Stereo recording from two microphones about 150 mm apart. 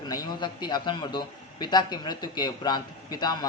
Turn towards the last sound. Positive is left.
turn(degrees=25)  # may be behind; listen again after turning